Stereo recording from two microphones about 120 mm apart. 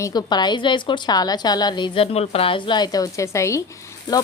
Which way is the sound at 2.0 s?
55° left (ahead or behind).